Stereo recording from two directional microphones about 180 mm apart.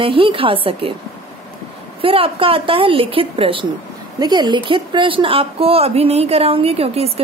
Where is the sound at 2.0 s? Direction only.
30° right (ahead or behind).